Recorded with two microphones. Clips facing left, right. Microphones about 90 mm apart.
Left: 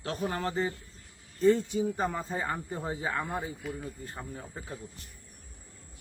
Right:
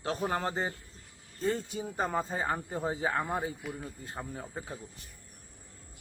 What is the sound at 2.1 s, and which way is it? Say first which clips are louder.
Speech: right 2 dB; 25° right (ahead or behind).